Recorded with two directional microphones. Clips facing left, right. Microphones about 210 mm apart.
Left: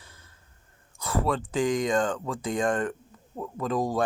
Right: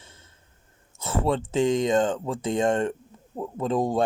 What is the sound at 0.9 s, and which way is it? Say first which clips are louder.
Speech: right 2 dB; 25° right (ahead or behind).